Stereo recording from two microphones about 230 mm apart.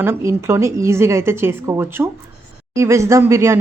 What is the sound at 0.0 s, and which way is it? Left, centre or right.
Speech, centre.